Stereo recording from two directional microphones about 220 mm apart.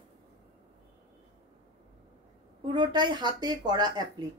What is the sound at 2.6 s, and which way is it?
A woman's voice, 20° right (ahead or behind).